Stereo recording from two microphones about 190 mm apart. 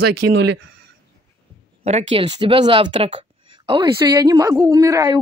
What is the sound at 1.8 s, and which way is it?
Speech, 35° right (ahead or behind).